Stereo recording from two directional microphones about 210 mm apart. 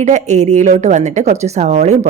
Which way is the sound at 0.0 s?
35° right (ahead or behind).